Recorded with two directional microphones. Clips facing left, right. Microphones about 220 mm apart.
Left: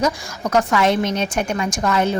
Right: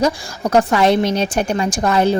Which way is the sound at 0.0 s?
30° right (ahead or behind).